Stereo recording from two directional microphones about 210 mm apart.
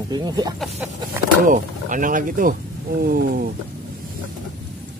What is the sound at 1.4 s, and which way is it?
Speech, 40° right (ahead or behind).